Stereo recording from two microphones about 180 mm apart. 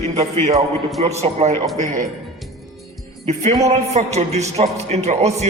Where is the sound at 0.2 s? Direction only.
35° right (ahead or behind).